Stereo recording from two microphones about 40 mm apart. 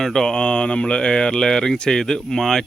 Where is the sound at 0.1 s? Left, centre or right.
Centre.